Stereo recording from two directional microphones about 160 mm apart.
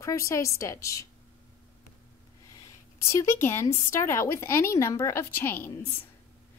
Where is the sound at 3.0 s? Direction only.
20° left (ahead or behind).